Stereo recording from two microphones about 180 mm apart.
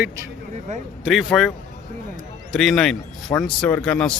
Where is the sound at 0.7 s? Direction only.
40° right (ahead or behind).